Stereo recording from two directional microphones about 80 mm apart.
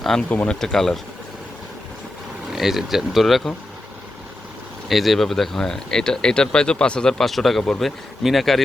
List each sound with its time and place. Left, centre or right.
0.0 s speech: centre
0.3 s speech: centre
0.6 s speech: centre
2.5 s speech: centre
4.9 s speech: centre